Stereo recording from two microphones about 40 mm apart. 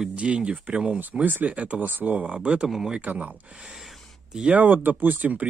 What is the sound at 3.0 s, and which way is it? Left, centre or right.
Speech, right.